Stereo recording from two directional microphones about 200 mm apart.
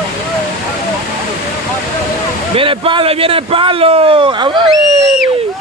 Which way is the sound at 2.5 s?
25° right (ahead or behind).